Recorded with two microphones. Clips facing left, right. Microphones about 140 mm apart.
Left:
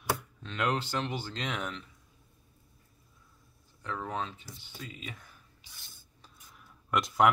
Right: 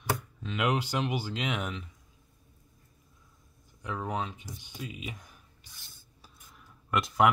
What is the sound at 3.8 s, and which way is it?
Speech, 15° right (ahead or behind).